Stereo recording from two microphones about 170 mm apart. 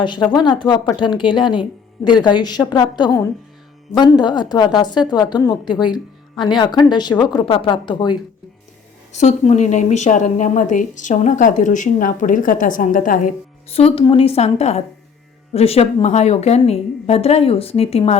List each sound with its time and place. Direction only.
0.0 s a woman's voice: 25° left (ahead or behind)
9.1 s speech: 40° left (ahead or behind)
13.7 s a woman's voice: 35° left (ahead or behind)